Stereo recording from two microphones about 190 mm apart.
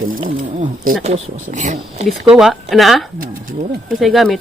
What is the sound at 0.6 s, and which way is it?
Speech, 45° right (ahead or behind).